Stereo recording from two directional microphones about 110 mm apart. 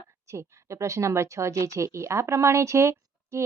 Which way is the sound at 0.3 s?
30° right (ahead or behind).